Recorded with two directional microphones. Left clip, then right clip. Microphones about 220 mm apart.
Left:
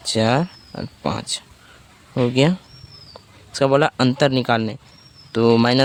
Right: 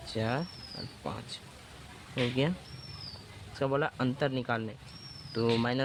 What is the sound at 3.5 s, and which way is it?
Speech, 55° left (ahead or behind).